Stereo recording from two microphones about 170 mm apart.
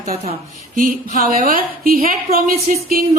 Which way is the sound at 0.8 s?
50° right (ahead or behind).